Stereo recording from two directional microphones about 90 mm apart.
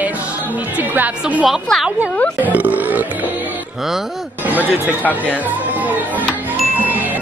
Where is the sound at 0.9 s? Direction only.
20° right (ahead or behind).